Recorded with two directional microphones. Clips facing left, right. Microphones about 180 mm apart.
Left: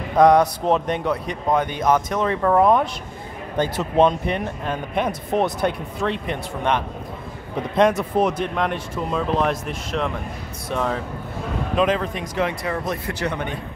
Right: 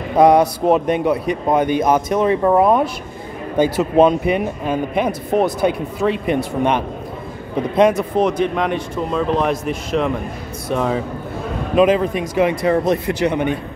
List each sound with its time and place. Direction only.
0.2 s a man's voice: 10° right (ahead or behind)
12.8 s a man's voice: 20° right (ahead or behind)